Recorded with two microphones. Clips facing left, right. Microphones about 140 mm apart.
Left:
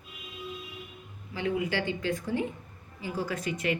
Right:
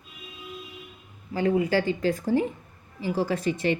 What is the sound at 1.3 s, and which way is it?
A woman's voice, 40° right (ahead or behind).